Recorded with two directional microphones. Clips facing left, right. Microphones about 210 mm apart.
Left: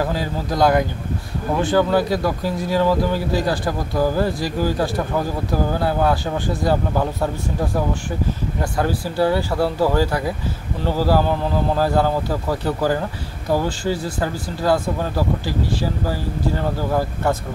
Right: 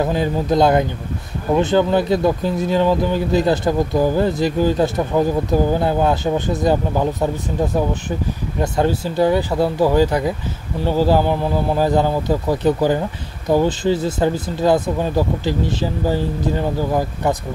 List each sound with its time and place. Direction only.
0.0 s speech: 20° right (ahead or behind)